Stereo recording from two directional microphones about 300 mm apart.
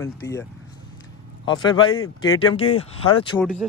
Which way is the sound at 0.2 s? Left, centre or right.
Centre.